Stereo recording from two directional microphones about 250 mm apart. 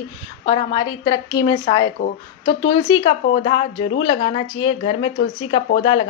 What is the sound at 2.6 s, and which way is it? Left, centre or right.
A woman's voice, centre.